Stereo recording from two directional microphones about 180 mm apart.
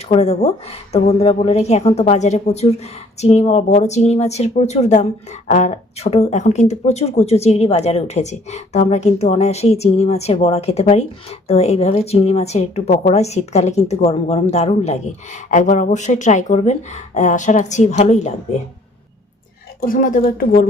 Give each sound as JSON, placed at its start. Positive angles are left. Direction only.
{"t": 0.1, "sound": "speech", "side_deg": 35}
{"t": 19.8, "sound": "speech", "side_deg": 50}